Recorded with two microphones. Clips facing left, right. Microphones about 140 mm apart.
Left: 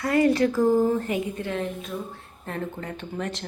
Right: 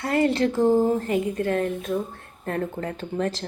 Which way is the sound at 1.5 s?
50° right (ahead or behind).